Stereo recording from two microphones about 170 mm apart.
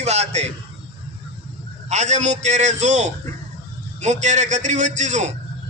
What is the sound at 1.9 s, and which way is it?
A man's voice, 45° right (ahead or behind).